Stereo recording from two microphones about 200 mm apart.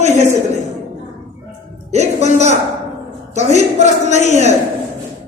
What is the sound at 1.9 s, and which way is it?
Speech, 35° right (ahead or behind).